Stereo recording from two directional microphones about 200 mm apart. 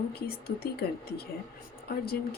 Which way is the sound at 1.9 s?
50° left (ahead or behind).